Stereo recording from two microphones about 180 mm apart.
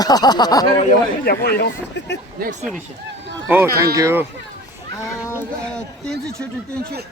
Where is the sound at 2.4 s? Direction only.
45° right (ahead or behind).